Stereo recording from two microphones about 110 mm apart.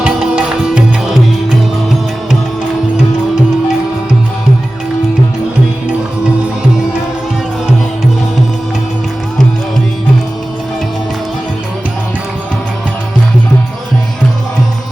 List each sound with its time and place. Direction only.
0.0 s music: 5° right (ahead or behind)